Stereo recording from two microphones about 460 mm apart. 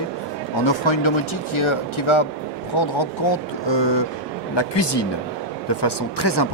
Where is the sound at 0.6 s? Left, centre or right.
Left.